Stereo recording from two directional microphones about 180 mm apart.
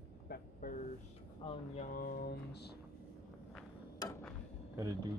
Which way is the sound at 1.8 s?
50° left (ahead or behind).